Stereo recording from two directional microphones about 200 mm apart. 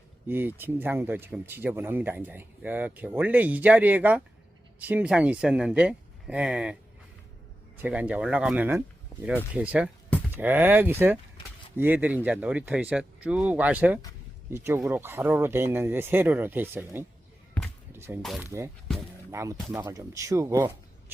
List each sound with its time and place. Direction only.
0.3 s speech: 10° right (ahead or behind)
7.8 s speech: 5° right (ahead or behind)
9.1 s a sound: 15° left (ahead or behind)
9.6 s speech: 5° right (ahead or behind)
18.2 s speech: centre (ahead or behind)
19.3 s speech: 15° right (ahead or behind)